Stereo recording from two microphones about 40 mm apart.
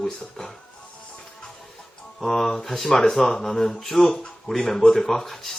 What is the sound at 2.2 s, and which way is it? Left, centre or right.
Music, centre.